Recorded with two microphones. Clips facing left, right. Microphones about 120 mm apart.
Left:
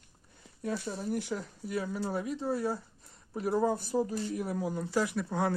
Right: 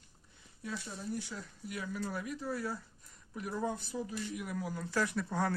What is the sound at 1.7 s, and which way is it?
Speech, 30° left (ahead or behind).